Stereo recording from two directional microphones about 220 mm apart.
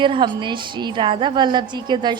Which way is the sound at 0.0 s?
20° right (ahead or behind).